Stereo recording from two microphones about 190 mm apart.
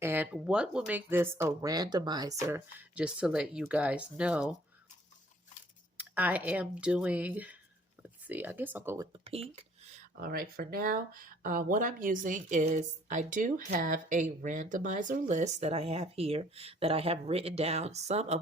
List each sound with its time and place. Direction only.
0.0 s speech: 10° right (ahead or behind)
2.5 s speech: 10° right (ahead or behind)
6.0 s speech: 10° right (ahead or behind)
9.5 s speech: 35° right (ahead or behind)